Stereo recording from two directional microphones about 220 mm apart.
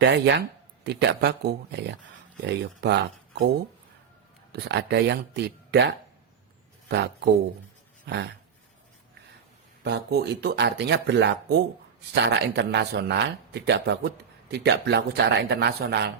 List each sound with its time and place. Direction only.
0.0 s speech: 50° right (ahead or behind)
4.5 s speech: 50° right (ahead or behind)
9.8 s speech: 50° right (ahead or behind)